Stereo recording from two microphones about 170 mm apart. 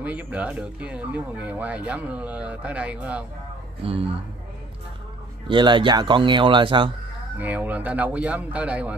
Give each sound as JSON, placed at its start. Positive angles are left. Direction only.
{"t": 0.0, "sound": "speech", "side_deg": -10}
{"t": 3.8, "sound": "a man's voice", "side_deg": -35}
{"t": 5.5, "sound": "speech", "side_deg": -30}
{"t": 7.3, "sound": "speech", "side_deg": -10}